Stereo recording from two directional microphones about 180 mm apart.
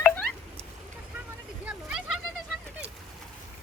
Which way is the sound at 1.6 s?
5° right (ahead or behind).